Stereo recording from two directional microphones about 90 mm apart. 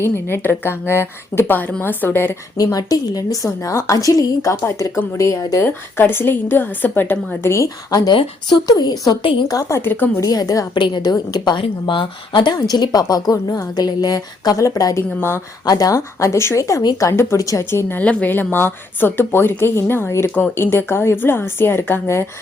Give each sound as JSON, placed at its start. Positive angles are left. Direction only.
{"t": 0.0, "sound": "a woman's voice", "side_deg": 25}
{"t": 2.6, "sound": "a woman's voice", "side_deg": 45}
{"t": 5.6, "sound": "a woman's voice", "side_deg": 25}
{"t": 7.9, "sound": "a woman's voice", "side_deg": 50}
{"t": 10.2, "sound": "a woman's voice", "side_deg": 40}
{"t": 10.8, "sound": "a woman's voice", "side_deg": 60}
{"t": 11.6, "sound": "speech", "side_deg": 65}
{"t": 12.5, "sound": "a woman's voice", "side_deg": 45}
{"t": 14.9, "sound": "a woman's voice", "side_deg": 30}
{"t": 15.6, "sound": "a woman's voice", "side_deg": 45}
{"t": 16.0, "sound": "a woman's voice", "side_deg": 30}